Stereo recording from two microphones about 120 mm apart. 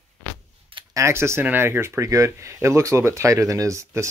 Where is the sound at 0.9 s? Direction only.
25° right (ahead or behind).